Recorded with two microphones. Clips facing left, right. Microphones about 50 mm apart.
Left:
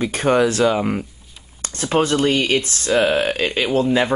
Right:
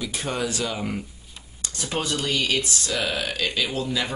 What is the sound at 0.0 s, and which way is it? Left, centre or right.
Speech, left.